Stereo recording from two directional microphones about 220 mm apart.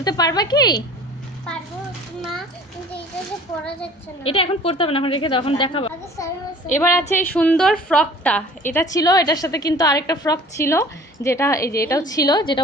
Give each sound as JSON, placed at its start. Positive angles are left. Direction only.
{"t": 0.0, "sound": "a woman's voice", "side_deg": 15}
{"t": 4.2, "sound": "a woman's voice", "side_deg": 25}
{"t": 6.7, "sound": "a woman's voice", "side_deg": 10}